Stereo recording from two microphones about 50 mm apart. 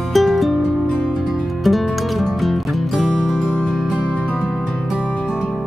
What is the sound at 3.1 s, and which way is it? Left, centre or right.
Music, centre.